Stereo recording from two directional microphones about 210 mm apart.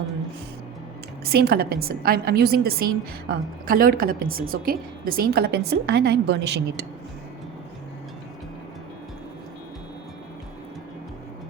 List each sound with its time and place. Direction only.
1.2 s a woman's voice: 50° right (ahead or behind)